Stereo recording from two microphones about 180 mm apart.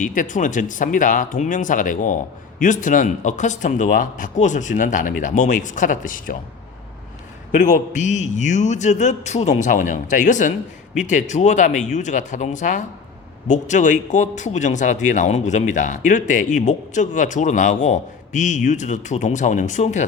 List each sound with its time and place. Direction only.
0.0 s a man's voice: 45° left (ahead or behind)
7.5 s a man's voice: 45° left (ahead or behind)